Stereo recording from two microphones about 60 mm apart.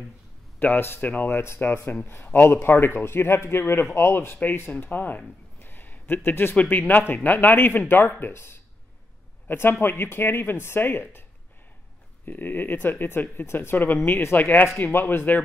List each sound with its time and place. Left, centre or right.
0.6 s speech: left
6.5 s speech: left
6.9 s speech: left
12.3 s speech: left